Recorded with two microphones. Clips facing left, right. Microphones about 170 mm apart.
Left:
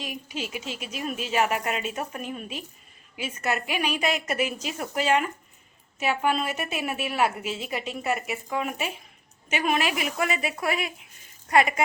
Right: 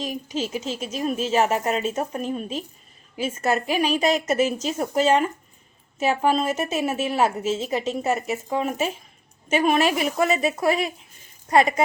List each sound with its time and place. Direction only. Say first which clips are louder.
0.0 s a woman's voice: right 6 dB; 35° right (ahead or behind)